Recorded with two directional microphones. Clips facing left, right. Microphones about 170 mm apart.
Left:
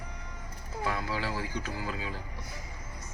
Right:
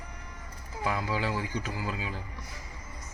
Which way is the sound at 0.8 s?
15° right (ahead or behind).